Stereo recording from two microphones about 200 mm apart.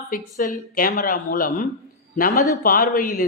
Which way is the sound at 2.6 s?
45° left (ahead or behind).